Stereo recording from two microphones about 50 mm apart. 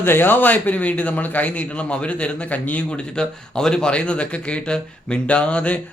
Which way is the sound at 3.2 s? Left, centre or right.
Centre.